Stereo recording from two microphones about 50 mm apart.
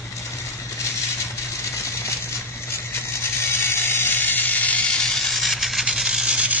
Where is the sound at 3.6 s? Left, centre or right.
Left.